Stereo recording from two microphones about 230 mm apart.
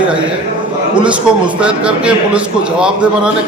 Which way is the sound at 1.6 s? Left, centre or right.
Centre.